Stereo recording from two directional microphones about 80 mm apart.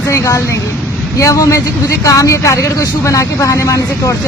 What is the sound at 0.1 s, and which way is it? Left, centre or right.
Speech, left.